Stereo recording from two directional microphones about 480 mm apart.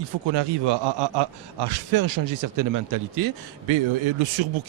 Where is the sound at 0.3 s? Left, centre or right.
Right.